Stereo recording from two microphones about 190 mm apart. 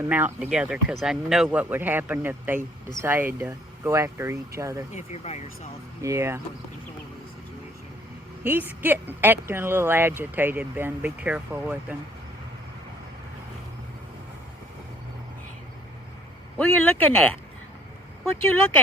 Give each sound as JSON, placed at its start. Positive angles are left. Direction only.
{"t": 0.0, "sound": "speech", "side_deg": -10}
{"t": 4.9, "sound": "speech", "side_deg": 35}
{"t": 6.0, "sound": "speech", "side_deg": -15}
{"t": 8.4, "sound": "speech", "side_deg": -10}
{"t": 16.6, "sound": "speech", "side_deg": 10}